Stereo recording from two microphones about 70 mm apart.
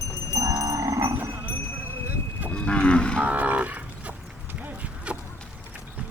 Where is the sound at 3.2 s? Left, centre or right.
Right.